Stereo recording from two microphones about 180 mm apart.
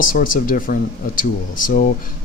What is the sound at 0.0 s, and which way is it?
Speech, 50° left (ahead or behind).